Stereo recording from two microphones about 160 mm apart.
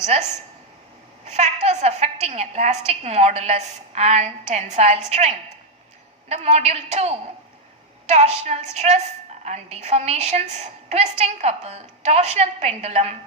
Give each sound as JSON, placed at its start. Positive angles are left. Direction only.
{"t": 1.2, "sound": "a woman's voice", "side_deg": -45}